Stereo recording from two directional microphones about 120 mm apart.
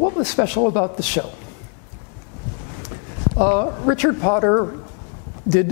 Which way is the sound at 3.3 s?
15° left (ahead or behind).